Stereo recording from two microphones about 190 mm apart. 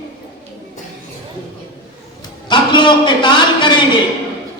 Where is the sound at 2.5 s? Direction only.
25° left (ahead or behind).